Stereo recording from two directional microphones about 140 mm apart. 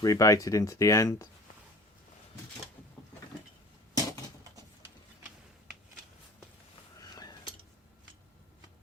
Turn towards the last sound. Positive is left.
turn(degrees=30)  # may be behind; listen again after turning